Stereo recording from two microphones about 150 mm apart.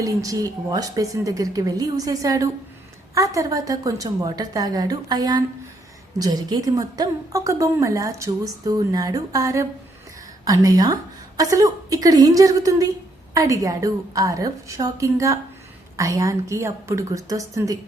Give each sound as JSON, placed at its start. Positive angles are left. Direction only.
{"t": 0.0, "sound": "a woman's voice", "side_deg": -25}